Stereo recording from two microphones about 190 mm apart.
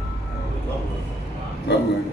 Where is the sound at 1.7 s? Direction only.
60° left (ahead or behind).